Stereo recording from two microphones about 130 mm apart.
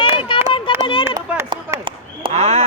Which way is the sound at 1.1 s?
25° right (ahead or behind).